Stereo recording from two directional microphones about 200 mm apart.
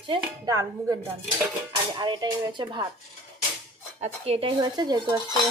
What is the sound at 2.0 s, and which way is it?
Speech, 20° right (ahead or behind).